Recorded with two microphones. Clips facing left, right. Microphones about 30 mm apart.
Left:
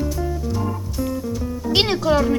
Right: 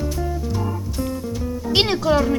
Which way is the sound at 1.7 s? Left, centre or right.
Centre.